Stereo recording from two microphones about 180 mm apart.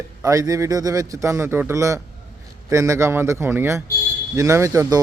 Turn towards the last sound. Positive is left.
turn(degrees=-20)  # may be behind; listen again after turning